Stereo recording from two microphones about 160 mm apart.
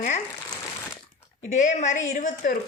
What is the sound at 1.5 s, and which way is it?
A woman's voice, 50° left (ahead or behind).